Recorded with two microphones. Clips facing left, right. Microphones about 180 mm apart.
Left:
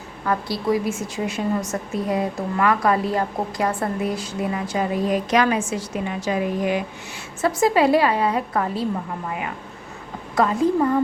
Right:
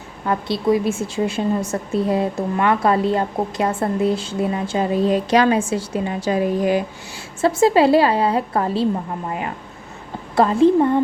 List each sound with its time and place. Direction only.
0.3 s a woman's voice: 25° right (ahead or behind)
10.3 s a woman's voice: 30° right (ahead or behind)